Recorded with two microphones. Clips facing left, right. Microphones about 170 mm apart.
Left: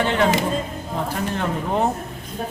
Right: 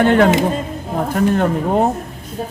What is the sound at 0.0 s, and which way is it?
A man's voice, 55° right (ahead or behind).